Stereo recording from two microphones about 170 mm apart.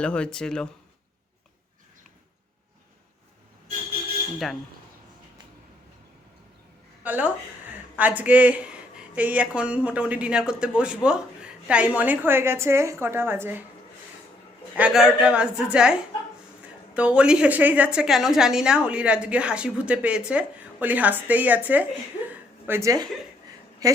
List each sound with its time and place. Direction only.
0.0 s a woman's voice: 5° left (ahead or behind)
7.0 s speech: 10° right (ahead or behind)
14.8 s a woman's voice: 5° right (ahead or behind); by 24.0 s 20° right (ahead or behind)